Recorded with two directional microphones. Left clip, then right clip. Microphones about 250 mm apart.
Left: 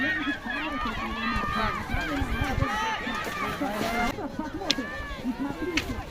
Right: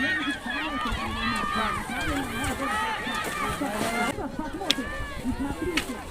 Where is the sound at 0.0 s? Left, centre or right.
Right.